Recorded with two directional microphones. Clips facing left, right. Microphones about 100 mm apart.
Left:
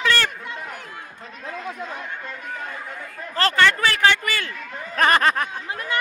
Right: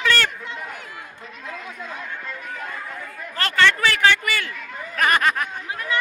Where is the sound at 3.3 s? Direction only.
30° left (ahead or behind).